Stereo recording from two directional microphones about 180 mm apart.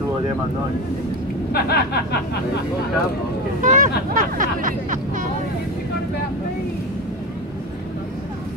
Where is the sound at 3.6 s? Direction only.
45° right (ahead or behind).